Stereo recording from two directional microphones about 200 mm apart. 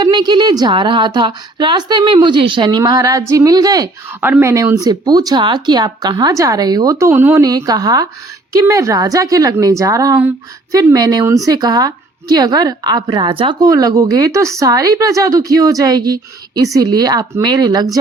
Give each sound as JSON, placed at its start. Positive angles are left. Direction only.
{"t": 0.0, "sound": "a woman's voice", "side_deg": -20}